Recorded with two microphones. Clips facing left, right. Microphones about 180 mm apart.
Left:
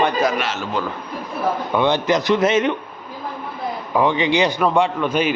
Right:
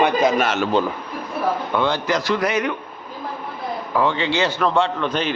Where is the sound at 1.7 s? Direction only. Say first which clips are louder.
Left 5 dB; 20° left (ahead or behind).